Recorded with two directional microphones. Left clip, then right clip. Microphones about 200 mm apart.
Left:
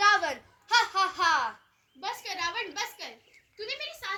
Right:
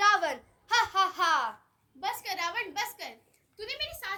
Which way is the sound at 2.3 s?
25° right (ahead or behind).